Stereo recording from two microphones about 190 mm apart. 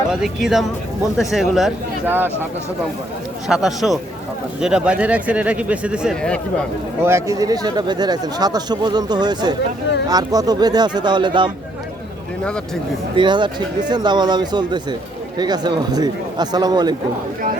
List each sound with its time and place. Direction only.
0.1 s speech: centre (ahead or behind)
3.5 s speech: centre (ahead or behind)
7.0 s speech: 15° right (ahead or behind)
13.1 s speech: 25° right (ahead or behind)